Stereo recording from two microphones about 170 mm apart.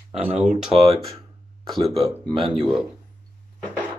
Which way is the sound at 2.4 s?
30° right (ahead or behind).